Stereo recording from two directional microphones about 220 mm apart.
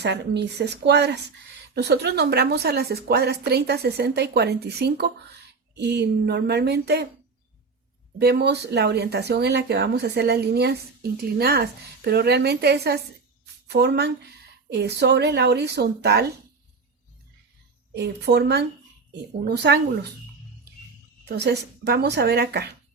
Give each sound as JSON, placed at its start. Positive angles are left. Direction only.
{"t": 0.0, "sound": "a woman's voice", "side_deg": -50}
{"t": 8.2, "sound": "a woman's voice", "side_deg": -45}
{"t": 17.9, "sound": "a woman's voice", "side_deg": -50}
{"t": 21.2, "sound": "a woman's voice", "side_deg": -50}